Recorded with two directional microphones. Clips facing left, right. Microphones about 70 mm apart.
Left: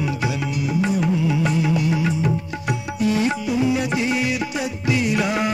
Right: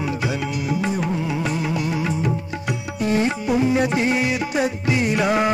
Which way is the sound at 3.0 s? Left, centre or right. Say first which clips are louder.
Even; right.